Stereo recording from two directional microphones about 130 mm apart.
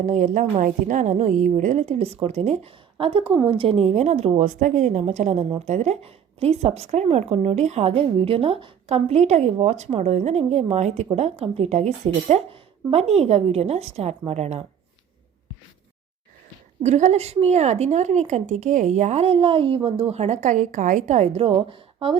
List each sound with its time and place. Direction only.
0.0 s a woman's voice: 70° right (ahead or behind)
3.0 s a woman's voice: 45° right (ahead or behind)
16.8 s a woman's voice: 60° right (ahead or behind); by 21.8 s 45° right (ahead or behind)